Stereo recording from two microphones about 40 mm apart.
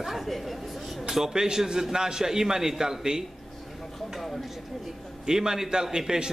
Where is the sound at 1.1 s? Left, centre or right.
Centre.